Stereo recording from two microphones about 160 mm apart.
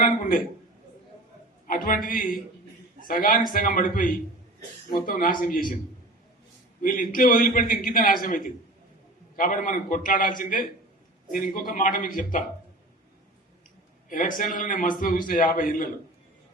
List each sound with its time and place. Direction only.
0.0 s a sound: 60° left (ahead or behind)
1.6 s a man's voice: 60° left (ahead or behind)
3.1 s a man's voice: 60° left (ahead or behind)
6.8 s a man's voice: 60° left (ahead or behind)
14.1 s a man's voice: 55° left (ahead or behind)